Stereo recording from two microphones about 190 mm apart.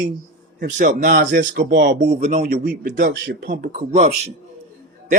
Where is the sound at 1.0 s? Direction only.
60° right (ahead or behind).